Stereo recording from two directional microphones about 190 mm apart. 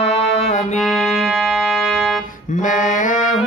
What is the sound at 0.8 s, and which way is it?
Music, centre (ahead or behind).